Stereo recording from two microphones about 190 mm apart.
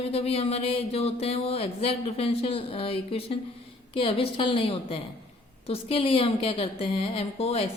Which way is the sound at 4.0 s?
30° left (ahead or behind).